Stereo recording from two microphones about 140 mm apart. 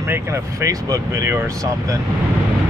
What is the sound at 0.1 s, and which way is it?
Speech, 20° right (ahead or behind).